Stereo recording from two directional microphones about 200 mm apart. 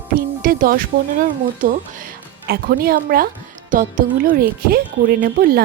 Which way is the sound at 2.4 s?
50° right (ahead or behind).